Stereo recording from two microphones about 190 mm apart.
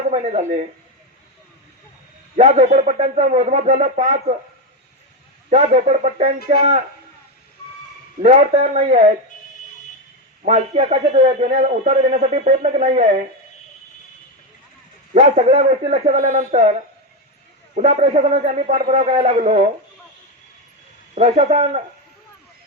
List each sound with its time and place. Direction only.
0.1 s a man's voice: 35° right (ahead or behind)
2.3 s a man's voice: 35° right (ahead or behind)
5.5 s a man's voice: 35° right (ahead or behind)
8.2 s a man's voice: 35° right (ahead or behind)
10.4 s a man's voice: 35° right (ahead or behind)
15.1 s a man's voice: 30° right (ahead or behind)
17.7 s a man's voice: 35° right (ahead or behind)
21.2 s a man's voice: 35° right (ahead or behind)